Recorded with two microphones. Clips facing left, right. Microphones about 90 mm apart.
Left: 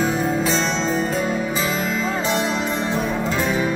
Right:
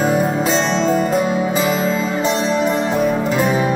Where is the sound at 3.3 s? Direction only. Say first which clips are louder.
Right 5 dB; 35° right (ahead or behind).